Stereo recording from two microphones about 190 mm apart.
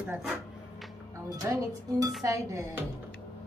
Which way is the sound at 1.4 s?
20° right (ahead or behind).